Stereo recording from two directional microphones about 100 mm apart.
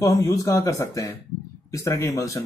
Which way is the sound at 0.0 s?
30° left (ahead or behind).